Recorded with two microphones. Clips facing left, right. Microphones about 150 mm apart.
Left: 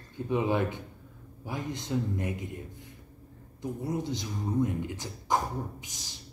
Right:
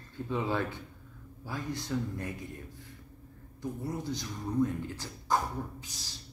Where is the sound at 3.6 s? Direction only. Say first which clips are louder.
Left 3 dB; 20° left (ahead or behind).